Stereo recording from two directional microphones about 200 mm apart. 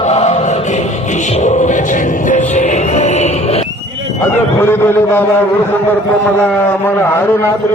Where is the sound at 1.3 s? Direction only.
35° left (ahead or behind).